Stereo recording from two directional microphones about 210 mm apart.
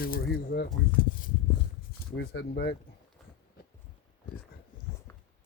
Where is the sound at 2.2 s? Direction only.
50° left (ahead or behind).